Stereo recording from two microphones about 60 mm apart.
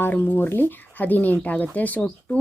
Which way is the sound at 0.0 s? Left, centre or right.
Left.